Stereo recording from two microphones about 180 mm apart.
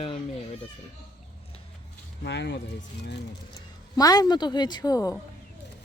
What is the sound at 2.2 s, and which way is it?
Speech, 75° left (ahead or behind).